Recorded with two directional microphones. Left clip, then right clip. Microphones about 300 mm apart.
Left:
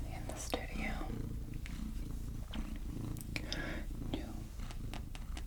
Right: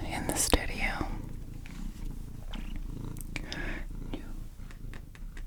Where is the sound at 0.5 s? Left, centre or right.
Right.